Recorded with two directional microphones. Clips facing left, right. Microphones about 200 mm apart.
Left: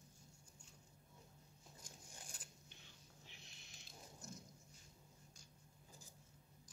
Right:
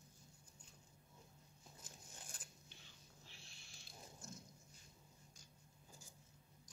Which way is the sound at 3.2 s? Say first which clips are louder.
Left 1 dB; 20° left (ahead or behind).